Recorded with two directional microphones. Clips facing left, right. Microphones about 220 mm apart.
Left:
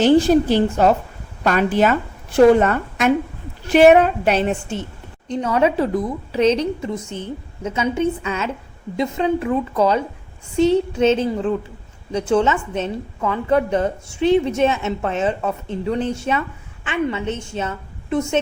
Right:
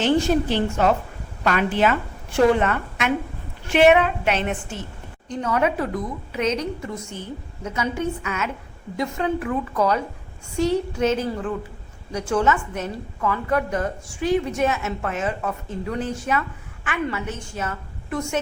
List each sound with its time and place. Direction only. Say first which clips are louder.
0.0 s a woman's voice: left 6 dB; 35° left (ahead or behind)